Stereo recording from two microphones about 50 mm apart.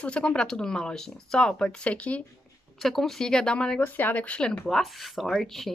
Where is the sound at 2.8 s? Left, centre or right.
Centre.